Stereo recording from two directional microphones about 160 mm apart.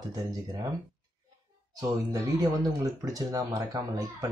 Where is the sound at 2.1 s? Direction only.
20° right (ahead or behind).